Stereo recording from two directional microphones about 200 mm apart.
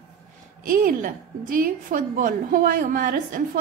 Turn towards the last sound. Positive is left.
turn(degrees=-40)  # may be behind; listen again after turning